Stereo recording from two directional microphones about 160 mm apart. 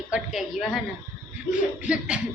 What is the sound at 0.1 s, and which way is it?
Speech, 5° right (ahead or behind).